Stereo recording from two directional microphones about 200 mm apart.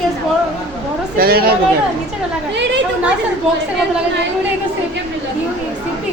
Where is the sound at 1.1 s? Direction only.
50° right (ahead or behind).